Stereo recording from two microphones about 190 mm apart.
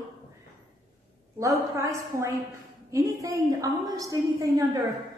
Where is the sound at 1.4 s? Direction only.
15° right (ahead or behind).